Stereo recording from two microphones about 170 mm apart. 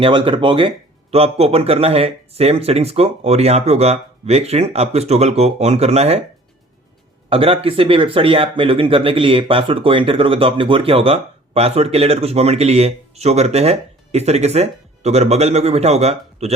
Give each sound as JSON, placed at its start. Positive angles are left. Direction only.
{"t": 0.0, "sound": "speech", "side_deg": -30}
{"t": 7.3, "sound": "speech", "side_deg": -35}